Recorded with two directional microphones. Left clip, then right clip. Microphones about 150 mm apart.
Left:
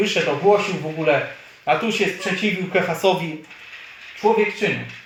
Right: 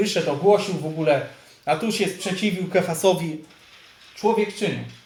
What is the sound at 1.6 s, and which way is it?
Speech, 25° right (ahead or behind).